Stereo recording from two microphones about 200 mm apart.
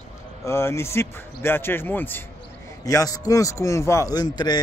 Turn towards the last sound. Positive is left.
turn(degrees=20)  # may be behind; listen again after turning